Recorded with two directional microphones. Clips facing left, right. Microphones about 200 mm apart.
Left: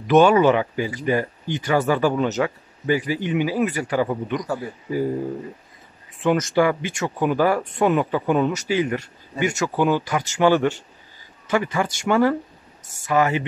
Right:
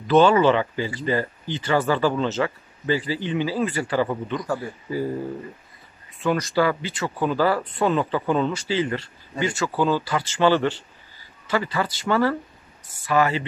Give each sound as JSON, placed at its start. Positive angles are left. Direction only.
{"t": 0.0, "sound": "speech", "side_deg": 15}
{"t": 6.1, "sound": "speech", "side_deg": 20}